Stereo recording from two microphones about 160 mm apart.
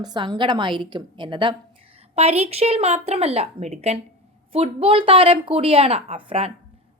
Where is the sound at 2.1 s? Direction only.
40° right (ahead or behind).